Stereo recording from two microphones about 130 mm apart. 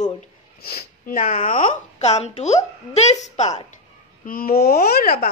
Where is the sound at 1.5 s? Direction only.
75° left (ahead or behind).